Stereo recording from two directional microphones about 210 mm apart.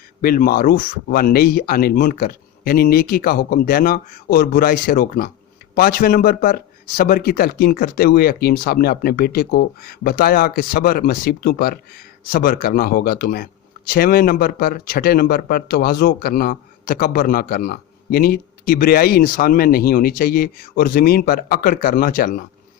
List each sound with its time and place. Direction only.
0.2 s speech: 45° left (ahead or behind)